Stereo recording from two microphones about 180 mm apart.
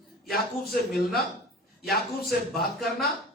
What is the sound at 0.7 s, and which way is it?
Speech, centre (ahead or behind).